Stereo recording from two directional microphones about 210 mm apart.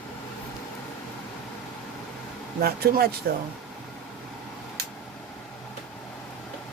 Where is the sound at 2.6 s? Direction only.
45° right (ahead or behind).